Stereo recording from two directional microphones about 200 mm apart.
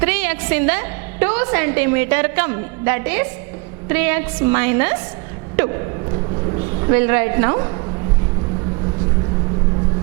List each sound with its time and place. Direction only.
0.0 s a woman's voice: 10° right (ahead or behind)
5.5 s a sound: 20° right (ahead or behind)
6.9 s a woman's voice: 10° right (ahead or behind)